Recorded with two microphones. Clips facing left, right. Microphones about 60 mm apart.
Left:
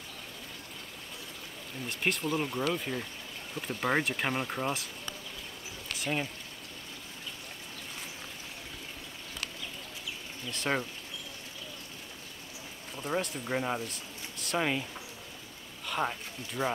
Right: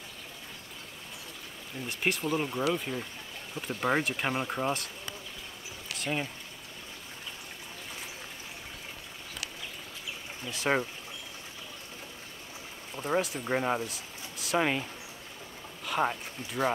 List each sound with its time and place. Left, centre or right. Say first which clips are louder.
1.9 s speech: right 1 dB; centre
5.9 s pour: even; centre
10.7 s speech: right 3 dB; centre
12.9 s speech: right 3 dB; right
13.8 s speech: right 1 dB; centre
16.0 s speech: right 3 dB; centre